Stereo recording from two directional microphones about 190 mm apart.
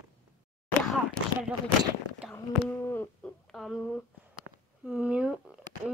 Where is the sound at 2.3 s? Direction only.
10° left (ahead or behind).